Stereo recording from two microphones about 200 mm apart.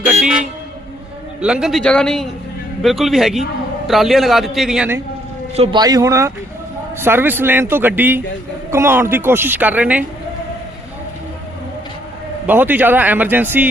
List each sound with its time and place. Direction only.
0.0 s vehicle: 5° right (ahead or behind)
1.4 s a man's voice: 5° right (ahead or behind)
5.5 s a woman's voice: 20° right (ahead or behind)
12.5 s a woman's voice: 10° right (ahead or behind)